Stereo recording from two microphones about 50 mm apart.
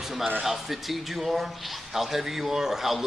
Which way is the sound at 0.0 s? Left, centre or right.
Centre.